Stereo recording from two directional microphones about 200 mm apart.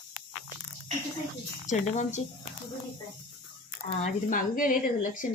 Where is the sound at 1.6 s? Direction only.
35° left (ahead or behind).